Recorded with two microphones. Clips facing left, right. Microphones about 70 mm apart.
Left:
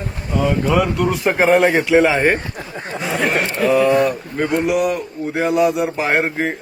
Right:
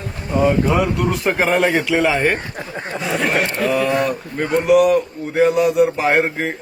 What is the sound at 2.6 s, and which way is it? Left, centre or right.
Speech, right.